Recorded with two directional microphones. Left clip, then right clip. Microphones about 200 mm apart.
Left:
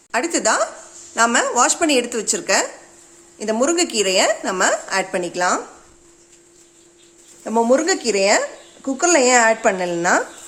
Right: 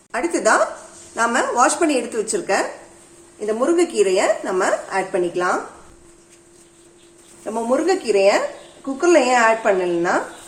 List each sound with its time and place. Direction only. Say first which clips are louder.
0.1 s a woman's voice: right 1 dB; 45° left (ahead or behind); by 5.5 s 65° left (ahead or behind)
7.7 s a woman's voice: right 2 dB; 65° left (ahead or behind)